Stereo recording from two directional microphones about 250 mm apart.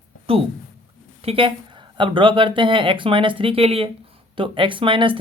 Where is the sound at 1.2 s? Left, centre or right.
Right.